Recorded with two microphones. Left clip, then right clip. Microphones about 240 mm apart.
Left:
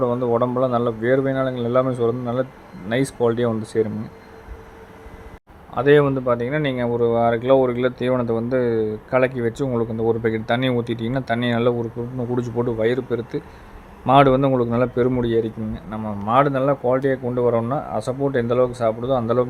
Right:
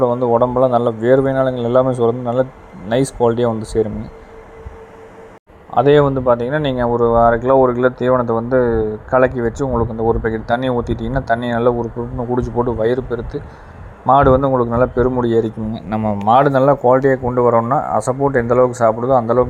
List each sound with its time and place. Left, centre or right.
0.0 s speech: centre
5.7 s a man's voice: centre
15.7 s a man's voice: right
16.9 s a man's voice: centre